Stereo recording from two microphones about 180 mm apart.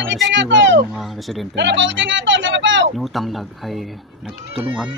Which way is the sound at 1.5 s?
85° right.